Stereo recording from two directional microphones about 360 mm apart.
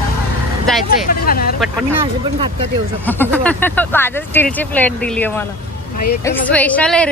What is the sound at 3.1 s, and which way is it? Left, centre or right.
Speech, centre.